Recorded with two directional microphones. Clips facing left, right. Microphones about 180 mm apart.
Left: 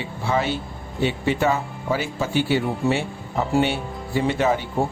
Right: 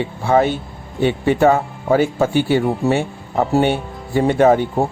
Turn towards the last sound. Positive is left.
turn(degrees=-50)  # may be behind; listen again after turning